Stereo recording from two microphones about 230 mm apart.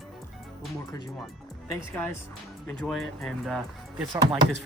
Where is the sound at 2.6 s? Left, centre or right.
Centre.